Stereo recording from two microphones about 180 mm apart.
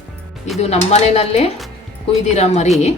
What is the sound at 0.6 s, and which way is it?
Speech, 35° left (ahead or behind).